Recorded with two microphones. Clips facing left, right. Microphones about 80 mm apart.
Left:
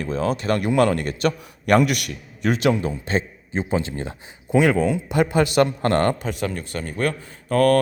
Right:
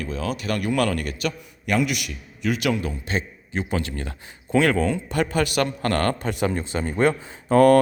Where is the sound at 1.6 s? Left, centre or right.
Left.